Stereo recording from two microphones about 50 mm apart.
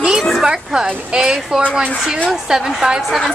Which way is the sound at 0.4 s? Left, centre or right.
Centre.